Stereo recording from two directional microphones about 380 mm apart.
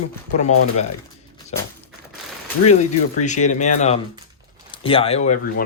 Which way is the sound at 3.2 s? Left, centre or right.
Centre.